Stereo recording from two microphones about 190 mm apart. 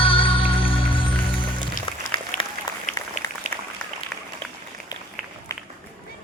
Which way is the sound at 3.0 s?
15° left (ahead or behind).